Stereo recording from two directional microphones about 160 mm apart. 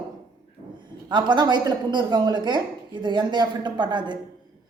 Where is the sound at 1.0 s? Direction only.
30° right (ahead or behind).